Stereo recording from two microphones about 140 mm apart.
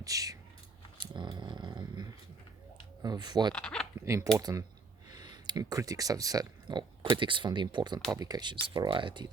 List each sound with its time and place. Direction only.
0.0 s speech: 25° right (ahead or behind)
0.9 s a sound: 35° right (ahead or behind)
3.0 s speech: 30° right (ahead or behind)
3.5 s speech: 5° left (ahead or behind)
4.0 s speech: 20° right (ahead or behind)